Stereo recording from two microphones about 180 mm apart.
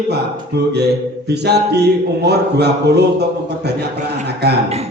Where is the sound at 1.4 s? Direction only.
65° right (ahead or behind).